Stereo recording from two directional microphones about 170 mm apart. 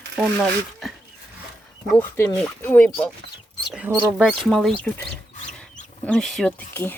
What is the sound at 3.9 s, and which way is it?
Speech, 15° right (ahead or behind).